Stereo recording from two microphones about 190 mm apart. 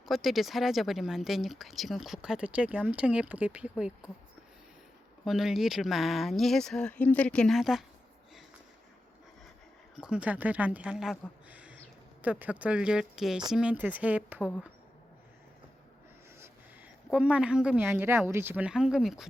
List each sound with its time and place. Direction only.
0.0 s speech: centre (ahead or behind)
5.2 s speech: centre (ahead or behind)
9.9 s speech: 5° right (ahead or behind)
17.1 s speech: 5° right (ahead or behind)